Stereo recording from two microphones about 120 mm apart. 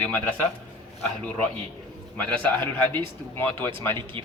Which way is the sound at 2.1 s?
10° left (ahead or behind).